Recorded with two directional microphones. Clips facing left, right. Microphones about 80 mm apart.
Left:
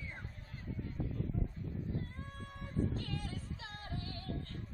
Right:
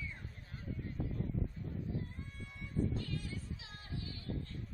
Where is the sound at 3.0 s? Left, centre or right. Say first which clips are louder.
Even; left.